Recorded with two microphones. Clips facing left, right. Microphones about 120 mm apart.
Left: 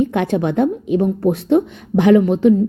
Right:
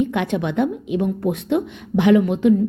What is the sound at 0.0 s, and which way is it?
A woman's voice, 35° left (ahead or behind).